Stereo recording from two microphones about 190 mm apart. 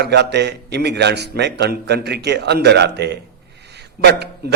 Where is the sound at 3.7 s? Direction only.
60° right (ahead or behind).